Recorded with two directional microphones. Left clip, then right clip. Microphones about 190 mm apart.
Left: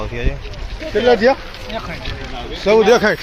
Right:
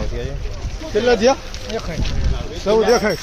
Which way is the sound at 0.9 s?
Centre (ahead or behind).